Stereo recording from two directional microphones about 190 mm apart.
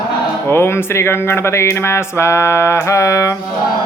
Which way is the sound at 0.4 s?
15° left (ahead or behind).